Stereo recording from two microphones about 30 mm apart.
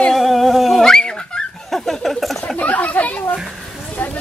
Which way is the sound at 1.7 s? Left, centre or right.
Centre.